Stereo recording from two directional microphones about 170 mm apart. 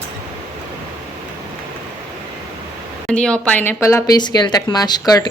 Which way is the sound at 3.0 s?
5° left (ahead or behind).